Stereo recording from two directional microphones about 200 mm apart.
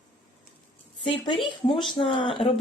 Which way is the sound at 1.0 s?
25° left (ahead or behind).